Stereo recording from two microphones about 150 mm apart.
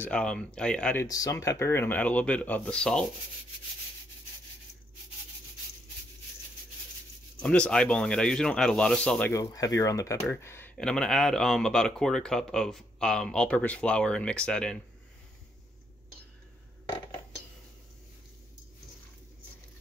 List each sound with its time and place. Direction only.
0.0 s speech: 5° left (ahead or behind)
1.0 s speech: 25° left (ahead or behind); by 3.1 s 5° left (ahead or behind)
7.3 s speech: 5° left (ahead or behind)
9.3 s speech: 20° left (ahead or behind)
10.8 s speech: 5° left (ahead or behind)